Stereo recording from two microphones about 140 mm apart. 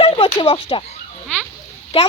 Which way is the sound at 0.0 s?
45° left (ahead or behind).